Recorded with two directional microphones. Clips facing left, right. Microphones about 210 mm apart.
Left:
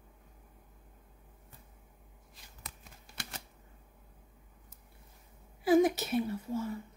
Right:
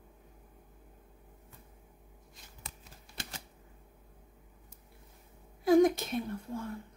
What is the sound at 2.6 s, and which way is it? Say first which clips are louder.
Shuffling cards: even; 30° right (ahead or behind).